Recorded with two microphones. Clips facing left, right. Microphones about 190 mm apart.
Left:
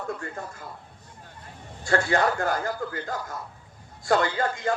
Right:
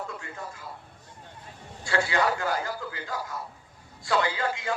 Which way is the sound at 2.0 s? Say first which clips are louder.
Left 2 dB; 45° left (ahead or behind).